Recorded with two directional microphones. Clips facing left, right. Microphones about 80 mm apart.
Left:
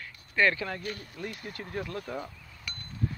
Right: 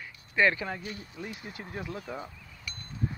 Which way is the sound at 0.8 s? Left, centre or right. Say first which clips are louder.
Left 3 dB; left.